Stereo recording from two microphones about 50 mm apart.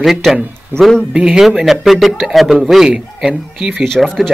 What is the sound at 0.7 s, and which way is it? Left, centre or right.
Speech, right.